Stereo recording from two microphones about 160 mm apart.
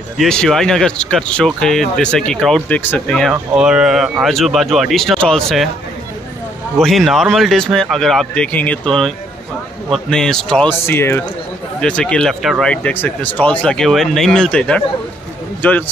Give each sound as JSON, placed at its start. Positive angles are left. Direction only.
{"t": 0.2, "sound": "speech", "side_deg": 5}
{"t": 6.8, "sound": "speech", "side_deg": 0}